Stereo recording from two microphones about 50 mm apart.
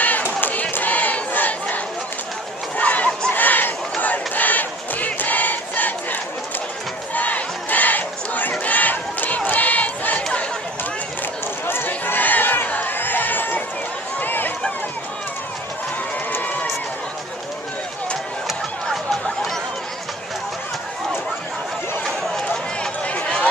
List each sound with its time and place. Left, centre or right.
0.0 s battle cry: left
2.8 s crowd: left
3.3 s chatter: left
4.0 s battle cry: left
7.2 s battle cry: left
9.5 s a sound: left
11.6 s chatter: left
14.2 s run: left
16.3 s run: left
18.9 s chatter: centre
22.0 s run: centre
23.0 s a sound: left